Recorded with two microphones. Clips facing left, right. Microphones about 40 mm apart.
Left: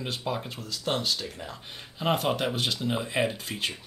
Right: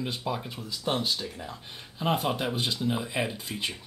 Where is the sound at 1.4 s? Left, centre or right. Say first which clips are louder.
Even; centre.